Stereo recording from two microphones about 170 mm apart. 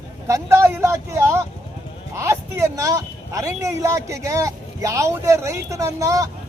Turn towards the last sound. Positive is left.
turn(degrees=-20)  # may be behind; listen again after turning